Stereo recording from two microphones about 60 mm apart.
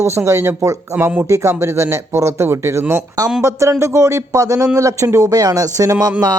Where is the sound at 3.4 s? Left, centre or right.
Right.